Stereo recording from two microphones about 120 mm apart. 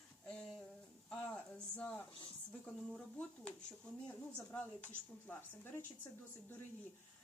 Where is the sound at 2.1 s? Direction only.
50° left (ahead or behind).